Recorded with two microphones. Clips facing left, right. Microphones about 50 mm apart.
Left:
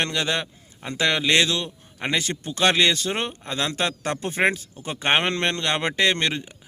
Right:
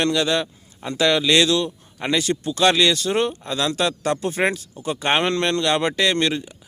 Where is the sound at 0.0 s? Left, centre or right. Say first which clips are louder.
Right 5 dB; left.